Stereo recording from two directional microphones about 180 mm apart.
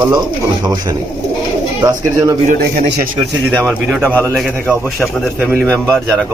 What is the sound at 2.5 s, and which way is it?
Speech, 50° right (ahead or behind).